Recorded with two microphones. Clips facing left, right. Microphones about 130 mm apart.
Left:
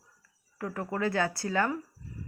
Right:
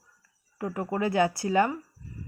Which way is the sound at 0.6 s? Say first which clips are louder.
Right 3 dB; 20° right (ahead or behind).